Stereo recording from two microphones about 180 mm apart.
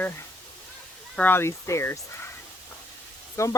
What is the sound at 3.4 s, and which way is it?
Speech, 15° left (ahead or behind).